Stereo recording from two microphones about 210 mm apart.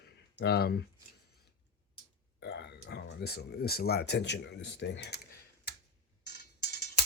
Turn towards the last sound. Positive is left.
turn(degrees=50)  # may be behind; listen again after turning